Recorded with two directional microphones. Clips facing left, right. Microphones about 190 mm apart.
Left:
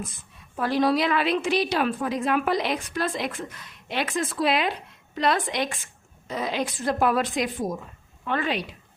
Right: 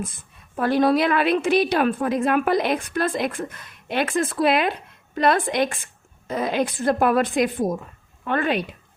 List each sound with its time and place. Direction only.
0.5 s a woman's voice: 55° right (ahead or behind)